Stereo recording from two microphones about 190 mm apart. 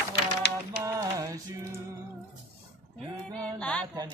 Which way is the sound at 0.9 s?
15° right (ahead or behind).